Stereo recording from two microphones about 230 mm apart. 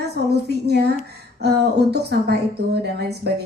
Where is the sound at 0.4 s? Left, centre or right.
Right.